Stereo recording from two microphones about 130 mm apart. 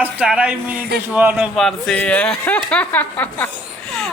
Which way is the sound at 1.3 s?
Centre (ahead or behind).